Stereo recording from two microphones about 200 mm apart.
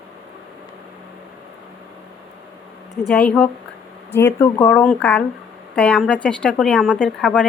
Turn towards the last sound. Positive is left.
turn(degrees=5)  # may be behind; listen again after turning